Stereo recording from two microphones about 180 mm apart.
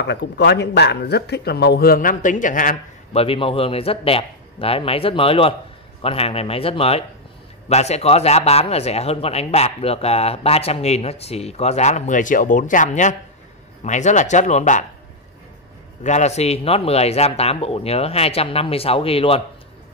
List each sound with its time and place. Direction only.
0.0 s speech: 70° left (ahead or behind); by 3.2 s 45° left (ahead or behind)
3.2 s speech: 30° left (ahead or behind)
16.0 s speech: 40° left (ahead or behind)